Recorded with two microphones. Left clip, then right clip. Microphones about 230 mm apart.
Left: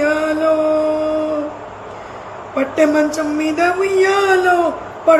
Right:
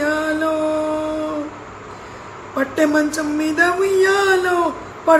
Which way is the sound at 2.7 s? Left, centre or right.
Centre.